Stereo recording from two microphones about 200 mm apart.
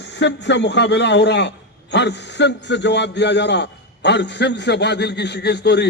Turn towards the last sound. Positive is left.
turn(degrees=55)  # may be behind; listen again after turning